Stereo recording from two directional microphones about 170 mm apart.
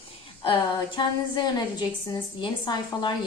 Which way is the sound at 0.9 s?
25° left (ahead or behind).